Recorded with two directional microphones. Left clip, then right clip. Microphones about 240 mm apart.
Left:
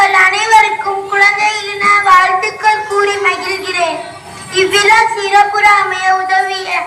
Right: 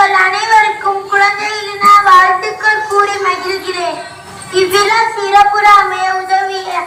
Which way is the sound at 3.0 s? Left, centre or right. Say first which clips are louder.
Even; left.